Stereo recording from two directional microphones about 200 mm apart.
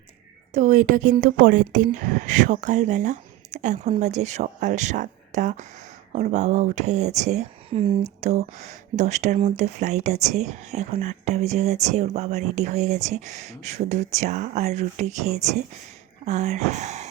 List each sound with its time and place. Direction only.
0.5 s speech: 40° right (ahead or behind)